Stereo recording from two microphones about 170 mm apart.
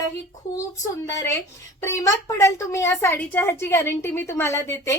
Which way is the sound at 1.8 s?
15° left (ahead or behind).